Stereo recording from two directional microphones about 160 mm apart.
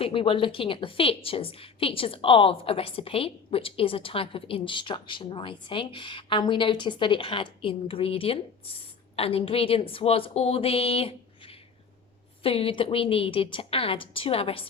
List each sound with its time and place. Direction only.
0.0 s a woman's voice: 35° left (ahead or behind)